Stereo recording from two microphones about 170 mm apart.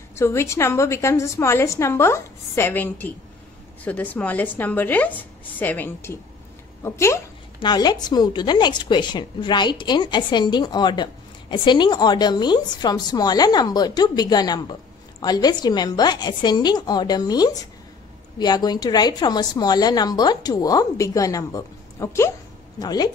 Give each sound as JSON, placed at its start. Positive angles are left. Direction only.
{"t": 0.1, "sound": "a woman's voice", "side_deg": 15}